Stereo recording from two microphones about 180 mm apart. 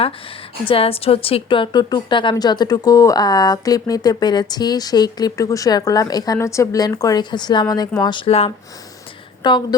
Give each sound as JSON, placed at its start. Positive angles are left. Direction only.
{"t": 0.7, "sound": "speech", "side_deg": 30}